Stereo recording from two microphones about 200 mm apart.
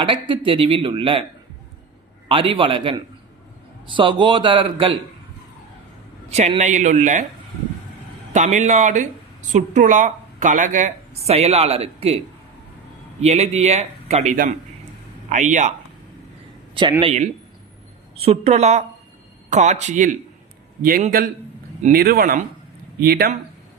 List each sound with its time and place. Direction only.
0.0 s speech: 25° right (ahead or behind)
2.3 s speech: 25° right (ahead or behind)
6.3 s speech: 35° right (ahead or behind)
8.3 s speech: 35° right (ahead or behind)
17.0 s speech: 30° right (ahead or behind); by 23.3 s 50° right (ahead or behind)